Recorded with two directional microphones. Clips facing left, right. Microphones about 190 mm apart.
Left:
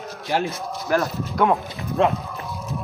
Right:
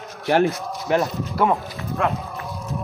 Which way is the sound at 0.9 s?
25° right (ahead or behind).